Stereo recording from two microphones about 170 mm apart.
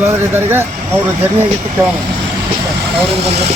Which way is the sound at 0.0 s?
15° right (ahead or behind).